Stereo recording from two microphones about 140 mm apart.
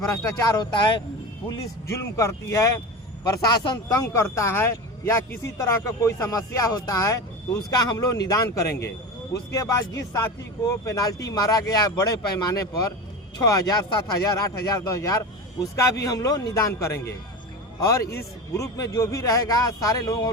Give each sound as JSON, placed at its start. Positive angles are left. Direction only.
{"t": 0.1, "sound": "speech", "side_deg": 25}
{"t": 2.0, "sound": "speech", "side_deg": 20}
{"t": 9.5, "sound": "speech", "side_deg": 25}
{"t": 18.0, "sound": "speech", "side_deg": 90}
{"t": 18.5, "sound": "speech", "side_deg": 20}